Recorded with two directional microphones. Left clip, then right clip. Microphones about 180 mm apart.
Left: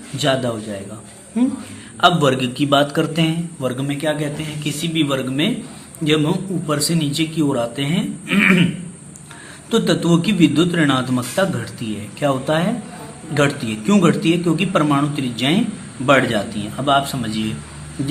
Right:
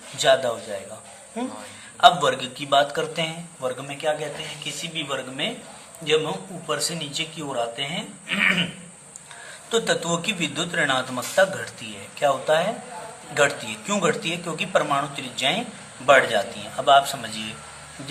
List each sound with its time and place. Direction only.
0.2 s a man's voice: 10° left (ahead or behind)
2.0 s a man's voice: 10° left (ahead or behind)
9.6 s a man's voice: 5° left (ahead or behind)